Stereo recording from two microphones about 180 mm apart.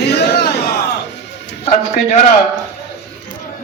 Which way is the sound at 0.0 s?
65° left (ahead or behind).